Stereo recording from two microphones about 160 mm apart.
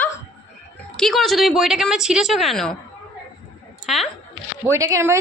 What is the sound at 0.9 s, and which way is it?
A woman's voice, centre (ahead or behind).